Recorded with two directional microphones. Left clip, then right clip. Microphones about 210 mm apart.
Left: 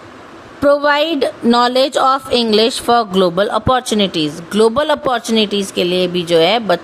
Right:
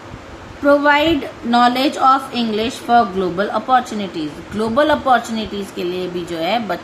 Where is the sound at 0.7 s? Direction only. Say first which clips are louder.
Even; 55° left (ahead or behind).